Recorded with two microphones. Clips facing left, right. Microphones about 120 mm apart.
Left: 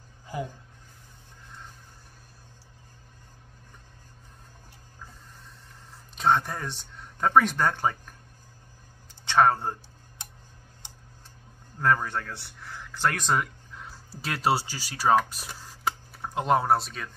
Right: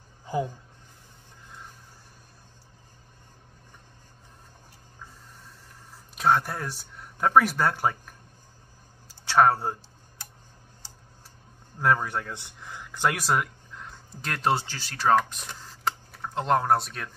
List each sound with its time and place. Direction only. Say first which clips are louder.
6.1 s speech: right 1 dB; 5° right (ahead or behind)
9.2 s speech: right 1 dB; 5° right (ahead or behind)
11.8 s speech: right 1 dB; 10° right (ahead or behind)